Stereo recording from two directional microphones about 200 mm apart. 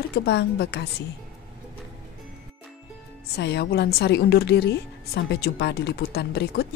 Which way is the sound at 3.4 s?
55° left (ahead or behind).